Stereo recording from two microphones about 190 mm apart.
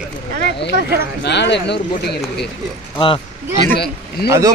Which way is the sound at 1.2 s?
65° left (ahead or behind).